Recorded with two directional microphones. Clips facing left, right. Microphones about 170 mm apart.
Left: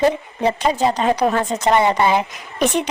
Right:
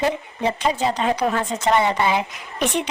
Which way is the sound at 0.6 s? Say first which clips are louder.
Left 3 dB; 40° left (ahead or behind).